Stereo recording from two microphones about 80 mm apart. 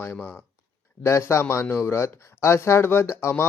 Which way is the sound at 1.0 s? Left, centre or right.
Left.